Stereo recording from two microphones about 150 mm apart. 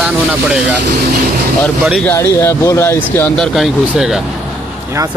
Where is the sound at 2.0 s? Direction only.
15° left (ahead or behind); by 4.2 s 5° right (ahead or behind).